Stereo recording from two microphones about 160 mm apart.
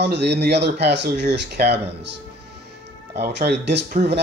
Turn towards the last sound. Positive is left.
turn(degrees=-90)